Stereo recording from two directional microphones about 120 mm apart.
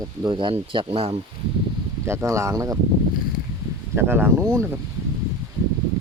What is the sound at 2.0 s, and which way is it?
Speech, 20° right (ahead or behind).